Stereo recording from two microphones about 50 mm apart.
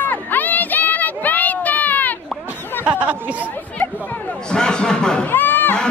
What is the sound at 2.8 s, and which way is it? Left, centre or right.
Speech, right.